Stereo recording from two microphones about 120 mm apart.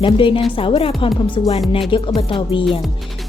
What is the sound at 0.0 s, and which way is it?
Speech, 45° left (ahead or behind).